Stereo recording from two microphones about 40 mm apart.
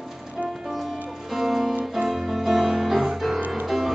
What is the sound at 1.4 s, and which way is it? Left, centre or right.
Music, centre.